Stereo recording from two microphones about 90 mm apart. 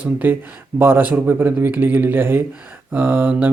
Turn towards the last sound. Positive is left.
turn(degrees=-20)  # may be behind; listen again after turning